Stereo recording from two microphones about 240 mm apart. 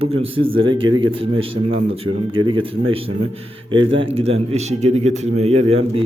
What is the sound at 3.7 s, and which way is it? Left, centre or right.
A man's voice, right.